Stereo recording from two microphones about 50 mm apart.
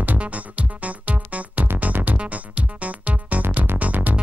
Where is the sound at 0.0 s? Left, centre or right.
Right.